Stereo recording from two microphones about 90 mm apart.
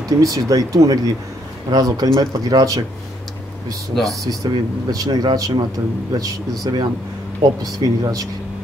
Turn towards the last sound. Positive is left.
turn(degrees=-55)  # may be behind; listen again after turning